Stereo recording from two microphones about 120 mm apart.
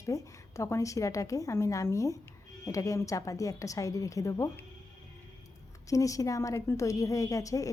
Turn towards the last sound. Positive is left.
turn(degrees=30)  # may be behind; listen again after turning